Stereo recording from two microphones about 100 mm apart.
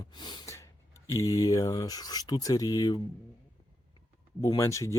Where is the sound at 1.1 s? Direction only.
35° left (ahead or behind).